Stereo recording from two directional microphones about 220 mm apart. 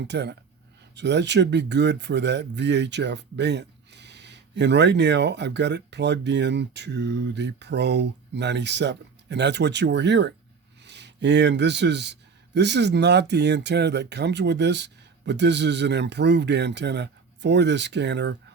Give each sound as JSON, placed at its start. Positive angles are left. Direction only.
{"t": 0.0, "sound": "speech", "side_deg": -50}